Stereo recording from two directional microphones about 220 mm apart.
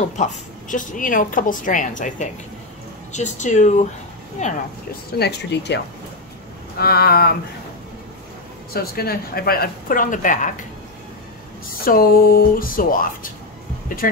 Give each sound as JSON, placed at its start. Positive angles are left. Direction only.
{"t": 0.1, "sound": "speech", "side_deg": 35}
{"t": 5.2, "sound": "speech", "side_deg": 50}
{"t": 6.8, "sound": "speech", "side_deg": 45}
{"t": 8.7, "sound": "speech", "side_deg": 45}
{"t": 11.8, "sound": "speech", "side_deg": 40}